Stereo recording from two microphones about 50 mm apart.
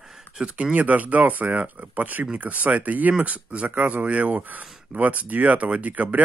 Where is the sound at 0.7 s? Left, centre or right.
Right.